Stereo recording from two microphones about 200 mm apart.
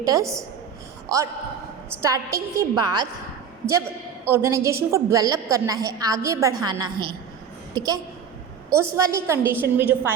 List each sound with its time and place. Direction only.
0.0 s a woman's voice: 15° right (ahead or behind)
2.0 s a woman's voice: 15° right (ahead or behind)